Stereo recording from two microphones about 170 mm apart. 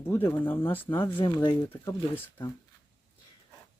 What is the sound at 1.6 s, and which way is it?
Speech, 10° left (ahead or behind).